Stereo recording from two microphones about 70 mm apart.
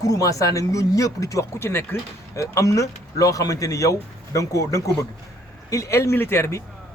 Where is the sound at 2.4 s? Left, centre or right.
Left.